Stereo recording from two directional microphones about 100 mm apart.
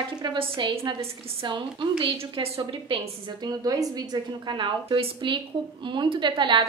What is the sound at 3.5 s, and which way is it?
A woman's voice, 40° right (ahead or behind).